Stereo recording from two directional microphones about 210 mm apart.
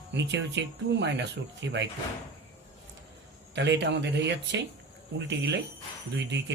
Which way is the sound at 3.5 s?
55° right (ahead or behind).